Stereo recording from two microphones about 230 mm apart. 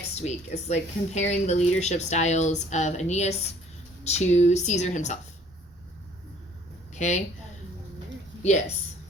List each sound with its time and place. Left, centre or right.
0.1 s speech: left
6.9 s a woman's voice: left
8.4 s speech: left